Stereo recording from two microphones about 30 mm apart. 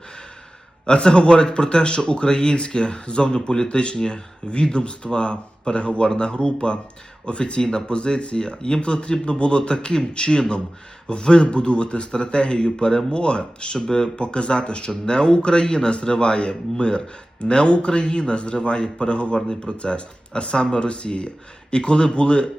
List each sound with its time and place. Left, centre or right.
0.9 s speech: left
12.7 s speech: left
13.1 s speech: left